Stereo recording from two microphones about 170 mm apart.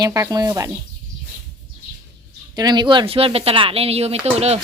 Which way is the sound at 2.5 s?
25° right (ahead or behind).